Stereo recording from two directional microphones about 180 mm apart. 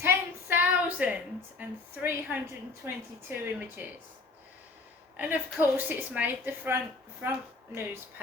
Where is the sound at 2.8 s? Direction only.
10° right (ahead or behind).